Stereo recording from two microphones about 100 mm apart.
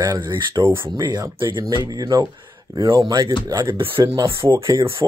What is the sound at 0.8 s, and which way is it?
Speech, 40° right (ahead or behind).